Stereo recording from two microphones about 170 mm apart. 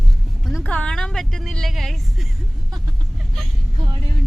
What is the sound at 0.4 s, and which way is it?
Vehicle, 5° left (ahead or behind).